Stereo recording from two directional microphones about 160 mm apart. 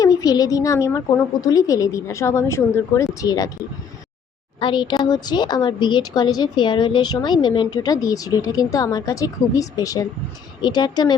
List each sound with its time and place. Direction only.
0.0 s speech: 20° left (ahead or behind)
4.6 s speech: 25° left (ahead or behind)